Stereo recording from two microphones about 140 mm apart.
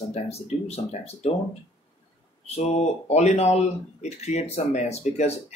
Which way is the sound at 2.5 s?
50° left (ahead or behind).